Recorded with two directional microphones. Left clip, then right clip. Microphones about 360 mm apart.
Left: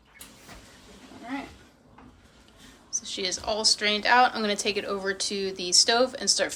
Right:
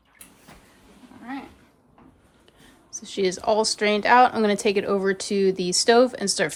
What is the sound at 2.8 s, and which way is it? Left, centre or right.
Speech, centre.